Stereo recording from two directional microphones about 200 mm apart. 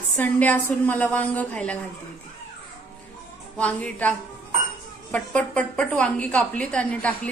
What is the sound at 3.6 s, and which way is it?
A woman's voice, 5° left (ahead or behind).